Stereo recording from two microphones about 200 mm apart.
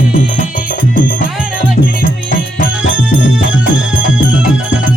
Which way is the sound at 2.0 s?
45° left (ahead or behind).